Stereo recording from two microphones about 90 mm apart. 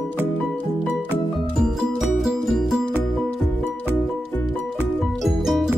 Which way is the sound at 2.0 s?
5° right (ahead or behind).